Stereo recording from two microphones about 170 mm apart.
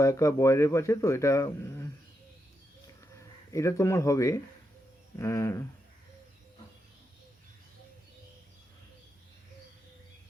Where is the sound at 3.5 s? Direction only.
15° left (ahead or behind).